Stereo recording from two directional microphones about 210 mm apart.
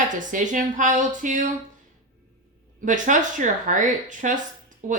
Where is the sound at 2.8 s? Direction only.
35° right (ahead or behind).